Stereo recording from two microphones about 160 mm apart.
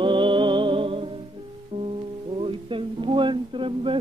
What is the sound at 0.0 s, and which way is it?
Music, 30° right (ahead or behind).